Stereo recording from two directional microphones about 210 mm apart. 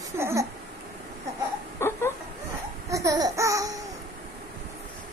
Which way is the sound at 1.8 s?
10° left (ahead or behind).